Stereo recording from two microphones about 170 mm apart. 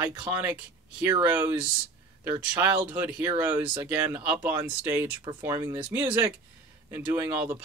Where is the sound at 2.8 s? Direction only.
10° right (ahead or behind).